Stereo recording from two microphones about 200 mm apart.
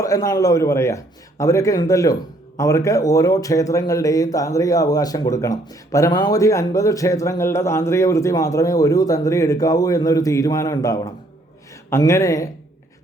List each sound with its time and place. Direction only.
0.0 s speech: 15° left (ahead or behind)